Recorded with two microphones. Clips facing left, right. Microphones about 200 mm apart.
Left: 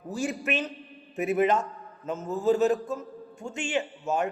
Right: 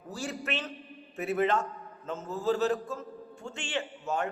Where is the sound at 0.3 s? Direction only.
15° left (ahead or behind).